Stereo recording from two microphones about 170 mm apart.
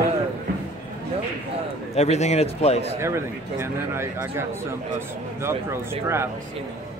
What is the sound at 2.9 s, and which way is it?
Speech, 15° right (ahead or behind).